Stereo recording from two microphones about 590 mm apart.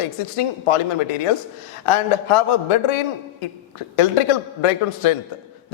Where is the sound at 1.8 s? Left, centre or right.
Left.